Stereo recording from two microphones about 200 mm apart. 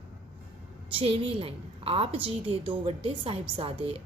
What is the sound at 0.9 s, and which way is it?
A woman's voice, 30° right (ahead or behind).